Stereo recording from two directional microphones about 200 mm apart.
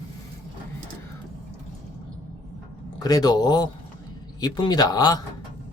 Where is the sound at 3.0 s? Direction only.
20° left (ahead or behind).